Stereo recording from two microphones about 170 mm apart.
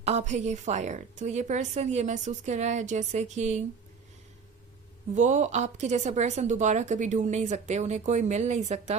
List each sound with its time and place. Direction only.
0.0 s speech: 40° right (ahead or behind)
5.1 s speech: 45° right (ahead or behind)